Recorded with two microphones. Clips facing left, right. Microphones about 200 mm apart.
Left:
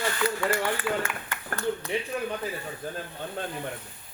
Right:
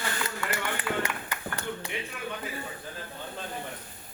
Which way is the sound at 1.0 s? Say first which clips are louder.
Right 1 dB; 15° right (ahead or behind).